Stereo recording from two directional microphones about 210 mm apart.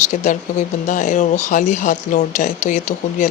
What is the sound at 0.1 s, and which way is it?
Speech, 35° left (ahead or behind).